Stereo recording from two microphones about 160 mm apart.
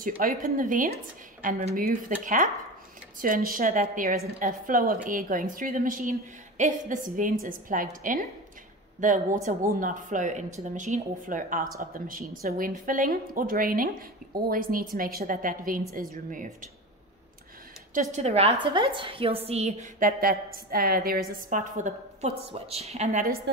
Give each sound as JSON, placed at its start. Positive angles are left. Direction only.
{"t": 0.0, "sound": "speech", "side_deg": -60}
{"t": 1.4, "sound": "a woman's voice", "side_deg": -45}
{"t": 1.9, "sound": "speech", "side_deg": -55}
{"t": 17.9, "sound": "a woman's voice", "side_deg": -45}
{"t": 20.0, "sound": "a woman's voice", "side_deg": -70}